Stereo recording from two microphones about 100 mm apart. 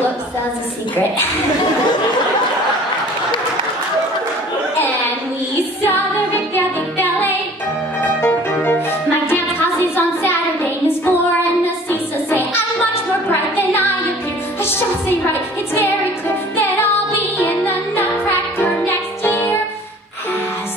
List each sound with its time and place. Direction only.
5.9 s music: 20° left (ahead or behind)
10.2 s child singing: 20° left (ahead or behind)
11.6 s music: 20° left (ahead or behind)
17.4 s music: 20° left (ahead or behind)